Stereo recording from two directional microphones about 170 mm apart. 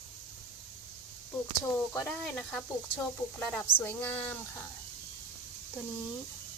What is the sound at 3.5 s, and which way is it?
Speech, 10° left (ahead or behind).